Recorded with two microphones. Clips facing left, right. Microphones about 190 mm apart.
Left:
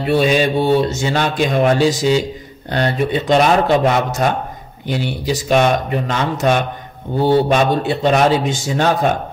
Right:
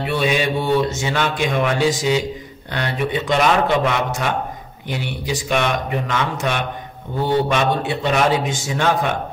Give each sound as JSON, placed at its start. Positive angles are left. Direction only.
{"t": 0.0, "sound": "a man's voice", "side_deg": 35}